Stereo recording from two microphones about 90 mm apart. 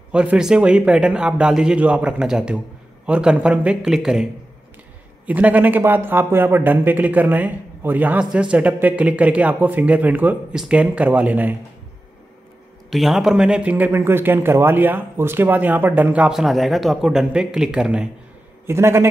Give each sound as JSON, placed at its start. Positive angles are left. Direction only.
{"t": 0.1, "sound": "speech", "side_deg": -10}
{"t": 5.2, "sound": "speech", "side_deg": -15}
{"t": 12.9, "sound": "speech", "side_deg": 0}
{"t": 16.3, "sound": "speech", "side_deg": 0}
{"t": 18.7, "sound": "speech", "side_deg": -30}